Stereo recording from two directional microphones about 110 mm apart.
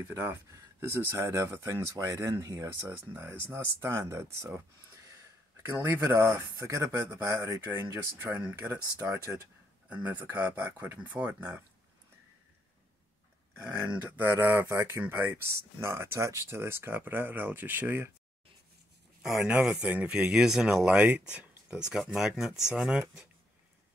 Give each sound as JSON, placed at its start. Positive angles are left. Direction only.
{"t": 0.1, "sound": "speech", "side_deg": -25}
{"t": 8.8, "sound": "speech", "side_deg": -30}
{"t": 9.8, "sound": "speech", "side_deg": -15}
{"t": 13.8, "sound": "speech", "side_deg": -15}
{"t": 19.2, "sound": "speech", "side_deg": -10}